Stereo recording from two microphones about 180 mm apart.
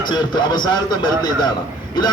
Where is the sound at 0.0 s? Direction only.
25° left (ahead or behind).